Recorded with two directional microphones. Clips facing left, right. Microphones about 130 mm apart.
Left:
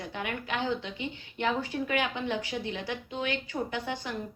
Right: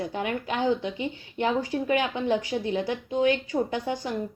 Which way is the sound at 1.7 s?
35° right (ahead or behind).